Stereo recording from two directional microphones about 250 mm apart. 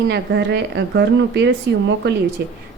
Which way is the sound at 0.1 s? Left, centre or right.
Right.